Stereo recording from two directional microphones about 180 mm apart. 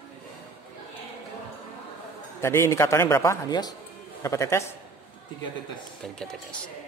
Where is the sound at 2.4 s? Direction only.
15° left (ahead or behind).